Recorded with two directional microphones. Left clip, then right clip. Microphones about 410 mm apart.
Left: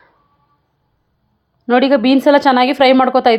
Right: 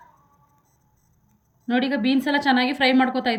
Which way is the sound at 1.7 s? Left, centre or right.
Centre.